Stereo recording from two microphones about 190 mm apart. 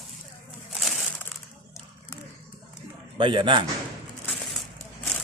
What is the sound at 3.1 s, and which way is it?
Speech, 25° right (ahead or behind).